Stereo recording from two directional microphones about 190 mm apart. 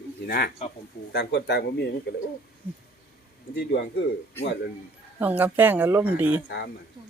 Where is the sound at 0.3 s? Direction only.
55° left (ahead or behind).